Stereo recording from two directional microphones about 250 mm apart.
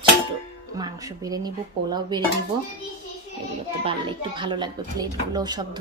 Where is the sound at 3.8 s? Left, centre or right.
Right.